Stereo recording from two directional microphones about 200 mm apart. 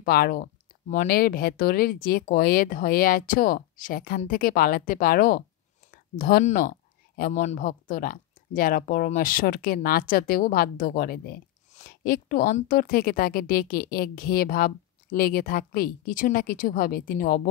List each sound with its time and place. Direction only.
0.0 s speech: 45° left (ahead or behind)